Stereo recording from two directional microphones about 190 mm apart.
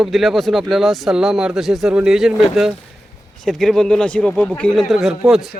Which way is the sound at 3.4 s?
5° left (ahead or behind).